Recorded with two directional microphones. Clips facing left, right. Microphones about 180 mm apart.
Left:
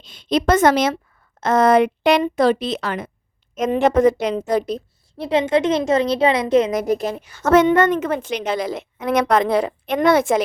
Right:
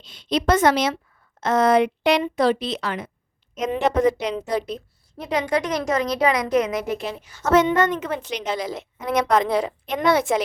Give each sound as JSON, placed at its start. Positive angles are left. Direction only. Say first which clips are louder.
{"t": 0.0, "sound": "a woman's voice", "louder": "left 3 dB", "side_deg": 50}
{"t": 6.7, "sound": "a woman's voice", "louder": "left 5 dB", "side_deg": 40}
{"t": 7.2, "sound": "a woman's voice", "louder": "left 3 dB", "side_deg": 60}